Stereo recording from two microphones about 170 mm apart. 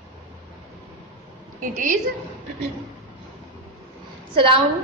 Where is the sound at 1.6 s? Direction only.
50° right (ahead or behind).